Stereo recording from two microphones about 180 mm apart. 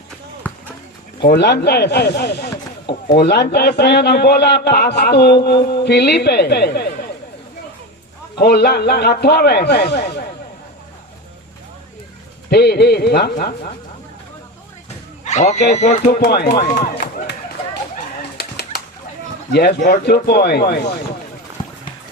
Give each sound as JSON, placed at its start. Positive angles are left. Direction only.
{"t": 1.2, "sound": "a man's voice", "side_deg": 65}
{"t": 8.4, "sound": "a man's voice", "side_deg": 65}
{"t": 12.5, "sound": "a man's voice", "side_deg": 65}
{"t": 15.2, "sound": "speech", "side_deg": 40}
{"t": 16.0, "sound": "a man's voice", "side_deg": 60}
{"t": 16.7, "sound": "run", "side_deg": 60}
{"t": 18.3, "sound": "bird flight", "side_deg": 65}
{"t": 19.5, "sound": "a man's voice", "side_deg": 60}